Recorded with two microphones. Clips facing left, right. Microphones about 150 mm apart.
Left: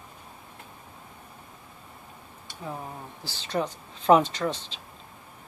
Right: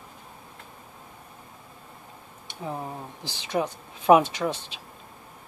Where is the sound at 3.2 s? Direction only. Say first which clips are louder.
Right 2 dB; 15° right (ahead or behind).